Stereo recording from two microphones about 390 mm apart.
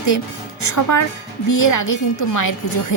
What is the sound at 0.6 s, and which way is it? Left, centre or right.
A woman's voice, left.